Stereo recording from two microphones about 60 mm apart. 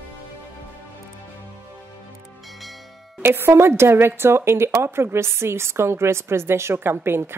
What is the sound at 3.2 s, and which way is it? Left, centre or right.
A woman's voice, right.